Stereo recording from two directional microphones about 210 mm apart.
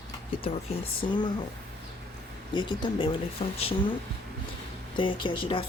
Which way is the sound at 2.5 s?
20° left (ahead or behind).